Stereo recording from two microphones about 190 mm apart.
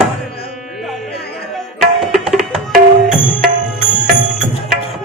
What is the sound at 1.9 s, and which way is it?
Tabla, centre (ahead or behind).